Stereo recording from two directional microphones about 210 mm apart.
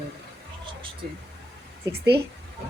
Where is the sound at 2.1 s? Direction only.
50° right (ahead or behind).